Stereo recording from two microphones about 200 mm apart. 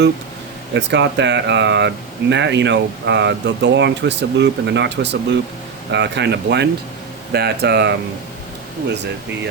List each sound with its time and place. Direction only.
0.7 s speech: 60° right (ahead or behind)